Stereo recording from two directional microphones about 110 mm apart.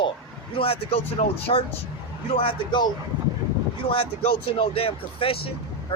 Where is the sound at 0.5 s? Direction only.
60° left (ahead or behind).